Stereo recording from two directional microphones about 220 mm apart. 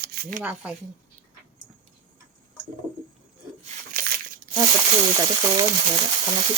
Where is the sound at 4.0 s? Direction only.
40° right (ahead or behind).